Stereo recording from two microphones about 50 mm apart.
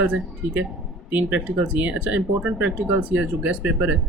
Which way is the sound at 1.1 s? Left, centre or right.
Right.